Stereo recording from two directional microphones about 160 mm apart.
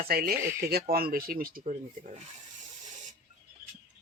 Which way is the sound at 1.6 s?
45° right (ahead or behind).